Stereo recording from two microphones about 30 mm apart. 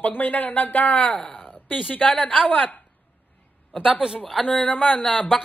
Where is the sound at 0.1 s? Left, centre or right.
Left.